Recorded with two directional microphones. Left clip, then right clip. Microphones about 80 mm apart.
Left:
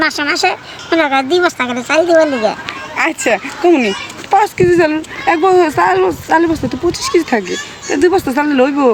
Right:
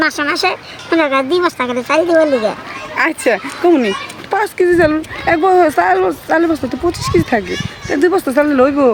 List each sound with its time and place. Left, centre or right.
0.0 s speech: right
2.9 s speech: right